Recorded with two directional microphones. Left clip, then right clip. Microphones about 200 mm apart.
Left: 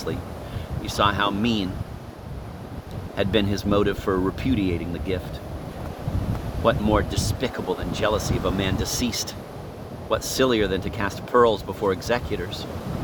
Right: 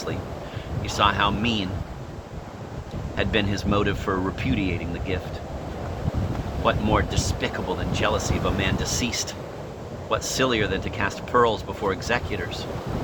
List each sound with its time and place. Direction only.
0.9 s speech: 60° left (ahead or behind)
3.2 s speech: 60° left (ahead or behind)
6.7 s speech: 65° left (ahead or behind)